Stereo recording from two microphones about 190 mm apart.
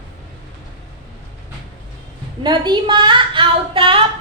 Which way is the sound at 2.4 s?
25° right (ahead or behind).